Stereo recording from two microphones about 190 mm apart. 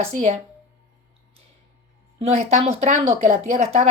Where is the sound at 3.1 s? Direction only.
35° right (ahead or behind).